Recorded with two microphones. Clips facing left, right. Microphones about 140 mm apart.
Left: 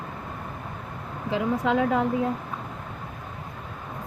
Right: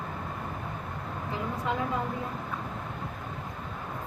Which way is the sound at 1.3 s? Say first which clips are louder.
Left 9 dB; 90° left.